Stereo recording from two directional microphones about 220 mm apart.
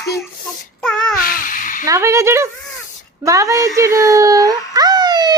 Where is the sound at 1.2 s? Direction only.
40° left (ahead or behind).